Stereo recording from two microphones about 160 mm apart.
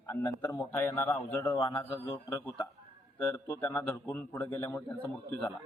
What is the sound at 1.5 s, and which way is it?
Speech, 35° left (ahead or behind).